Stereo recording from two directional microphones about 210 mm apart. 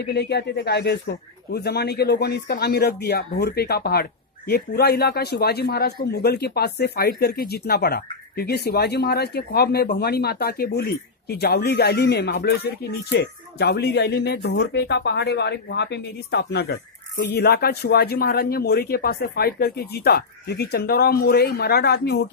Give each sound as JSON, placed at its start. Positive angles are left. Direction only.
{"t": 0.0, "sound": "speech", "side_deg": 50}